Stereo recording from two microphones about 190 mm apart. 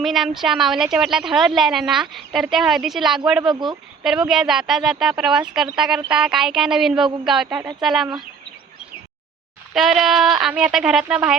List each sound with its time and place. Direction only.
0.0 s a woman's voice: centre (ahead or behind)
3.4 s speech: 25° right (ahead or behind)
4.0 s a woman's voice: 5° right (ahead or behind)
9.7 s a woman's voice: centre (ahead or behind)